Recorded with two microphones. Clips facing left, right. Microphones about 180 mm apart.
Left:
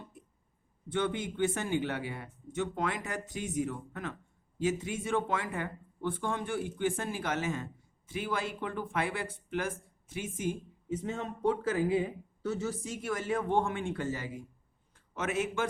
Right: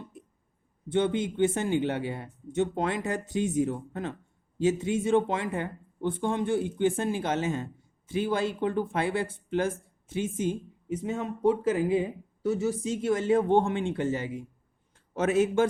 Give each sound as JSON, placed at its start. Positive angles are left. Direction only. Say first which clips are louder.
{"t": 0.9, "sound": "speech", "louder": "right 6 dB", "side_deg": -25}
{"t": 14.9, "sound": "a man's voice", "louder": "right 9 dB", "side_deg": -35}